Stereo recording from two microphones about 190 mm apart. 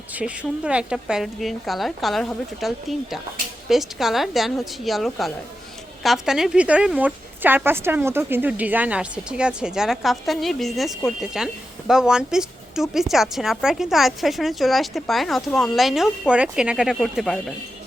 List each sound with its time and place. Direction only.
0.2 s speech: 5° right (ahead or behind)